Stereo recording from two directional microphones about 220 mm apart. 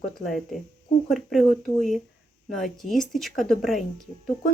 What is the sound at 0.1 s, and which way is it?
Speech, centre (ahead or behind).